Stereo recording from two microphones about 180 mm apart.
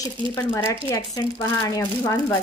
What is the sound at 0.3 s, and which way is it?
Speech, 20° left (ahead or behind).